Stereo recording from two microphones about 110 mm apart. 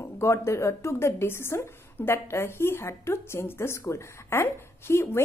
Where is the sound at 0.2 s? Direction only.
25° left (ahead or behind).